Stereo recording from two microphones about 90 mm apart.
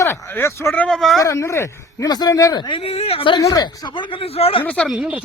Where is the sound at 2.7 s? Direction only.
90° left.